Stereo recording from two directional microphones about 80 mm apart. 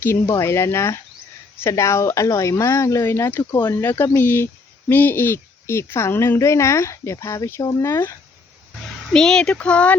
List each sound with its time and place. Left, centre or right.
0.0 s speech: left
9.0 s speech: centre